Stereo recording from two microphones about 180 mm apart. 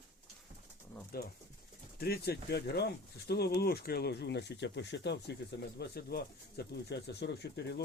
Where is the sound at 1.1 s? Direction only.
60° left (ahead or behind).